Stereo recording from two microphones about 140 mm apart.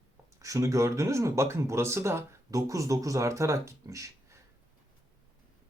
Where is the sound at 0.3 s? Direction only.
25° right (ahead or behind).